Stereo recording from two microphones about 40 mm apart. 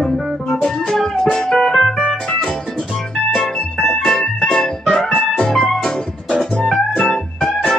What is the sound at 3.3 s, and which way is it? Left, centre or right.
Music, centre.